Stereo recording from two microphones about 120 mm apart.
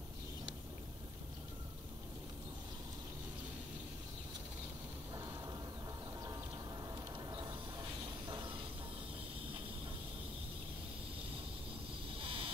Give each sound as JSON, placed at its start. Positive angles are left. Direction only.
{"t": 7.2, "sound": "mechanisms", "side_deg": -35}
{"t": 8.3, "sound": "a sound", "side_deg": -40}
{"t": 12.2, "sound": "vehicle", "side_deg": -50}